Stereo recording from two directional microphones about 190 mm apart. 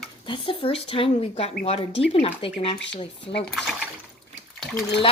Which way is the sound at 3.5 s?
Centre (ahead or behind).